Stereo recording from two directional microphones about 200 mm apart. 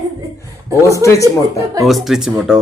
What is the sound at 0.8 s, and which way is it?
Speech, 15° left (ahead or behind).